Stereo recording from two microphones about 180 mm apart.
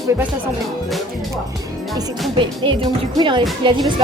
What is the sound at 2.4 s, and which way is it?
Speech, 25° right (ahead or behind).